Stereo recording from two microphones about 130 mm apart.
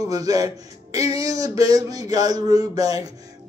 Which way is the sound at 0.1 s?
25° right (ahead or behind).